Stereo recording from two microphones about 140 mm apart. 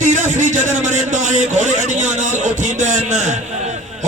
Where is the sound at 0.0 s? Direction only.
65° right (ahead or behind).